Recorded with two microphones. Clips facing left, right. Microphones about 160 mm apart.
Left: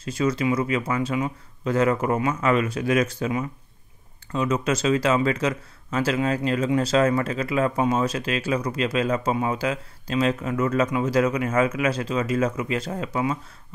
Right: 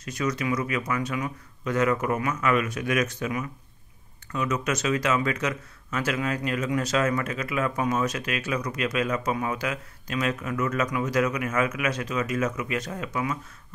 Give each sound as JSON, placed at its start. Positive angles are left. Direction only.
{"t": 0.0, "sound": "speech", "side_deg": 30}